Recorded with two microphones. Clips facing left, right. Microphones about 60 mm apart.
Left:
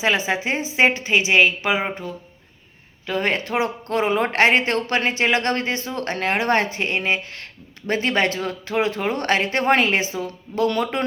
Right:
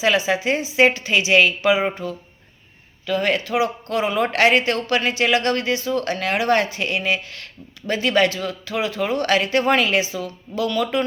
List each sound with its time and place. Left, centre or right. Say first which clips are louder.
0.0 s a woman's voice: right 2 dB; left
3.1 s speech: right 2 dB; left